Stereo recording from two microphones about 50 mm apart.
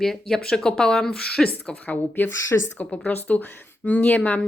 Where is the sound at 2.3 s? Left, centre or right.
Left.